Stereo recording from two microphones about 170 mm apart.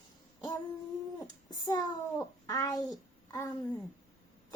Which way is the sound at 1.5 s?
25° left (ahead or behind).